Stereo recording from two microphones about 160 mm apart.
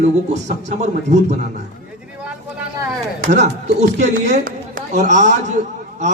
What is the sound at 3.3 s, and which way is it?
A man's voice, 45° right (ahead or behind).